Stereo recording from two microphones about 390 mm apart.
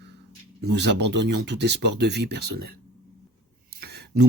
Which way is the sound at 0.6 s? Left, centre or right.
Right.